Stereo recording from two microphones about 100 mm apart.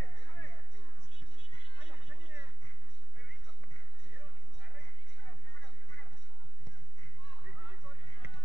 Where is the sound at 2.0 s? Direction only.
15° right (ahead or behind).